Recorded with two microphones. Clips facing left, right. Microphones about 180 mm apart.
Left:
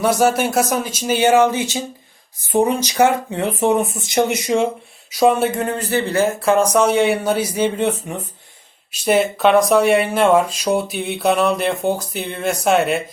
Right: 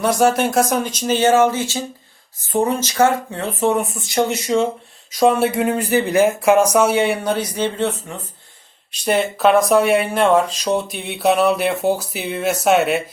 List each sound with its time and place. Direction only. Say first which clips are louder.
0.0 s speech: even; 5° left (ahead or behind)
5.2 s speech: even; centre (ahead or behind)
5.5 s speech: right 3 dB; 10° right (ahead or behind)
6.7 s speech: left 1 dB; 5° right (ahead or behind); by 8.1 s 15° left (ahead or behind)
8.9 s speech: left 2 dB; 5° left (ahead or behind)